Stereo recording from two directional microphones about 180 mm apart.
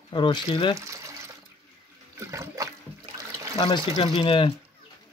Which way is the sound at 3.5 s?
30° left (ahead or behind).